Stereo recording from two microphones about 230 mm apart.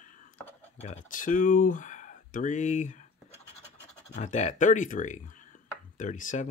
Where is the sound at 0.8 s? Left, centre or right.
Left.